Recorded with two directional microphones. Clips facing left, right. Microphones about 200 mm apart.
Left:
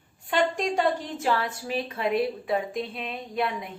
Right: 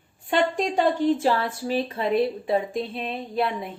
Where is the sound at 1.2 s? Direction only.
30° right (ahead or behind).